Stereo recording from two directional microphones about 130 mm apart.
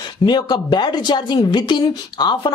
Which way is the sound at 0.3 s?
35° left (ahead or behind).